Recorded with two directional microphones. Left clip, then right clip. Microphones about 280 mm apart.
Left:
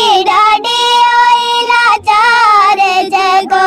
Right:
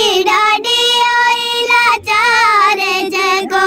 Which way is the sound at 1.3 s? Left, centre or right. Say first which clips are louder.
Left 4 dB; centre.